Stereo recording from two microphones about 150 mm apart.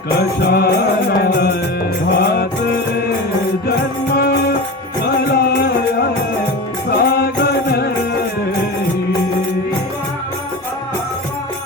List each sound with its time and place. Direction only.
0.2 s music: 90° left
3.7 s music: 90° left
6.9 s music: 90° left